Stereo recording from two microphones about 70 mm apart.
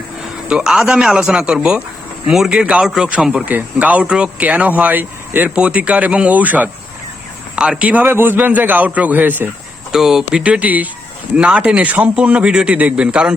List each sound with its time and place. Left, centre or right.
0.4 s a man's voice: centre
2.8 s speech: centre
3.4 s speech: right
9.9 s speech: centre
10.4 s a man's voice: centre